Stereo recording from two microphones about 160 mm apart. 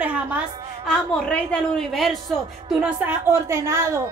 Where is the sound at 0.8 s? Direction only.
5° left (ahead or behind).